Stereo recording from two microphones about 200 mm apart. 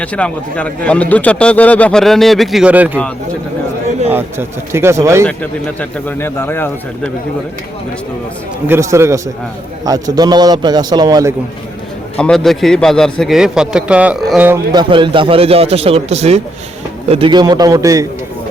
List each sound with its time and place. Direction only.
0.0 s a man's voice: 5° left (ahead or behind)
4.1 s speech: 10° right (ahead or behind)
5.2 s speech: 5° left (ahead or behind)
8.6 s a man's voice: 15° right (ahead or behind)
12.1 s a man's voice: 5° left (ahead or behind)
14.7 s a man's voice: 20° right (ahead or behind)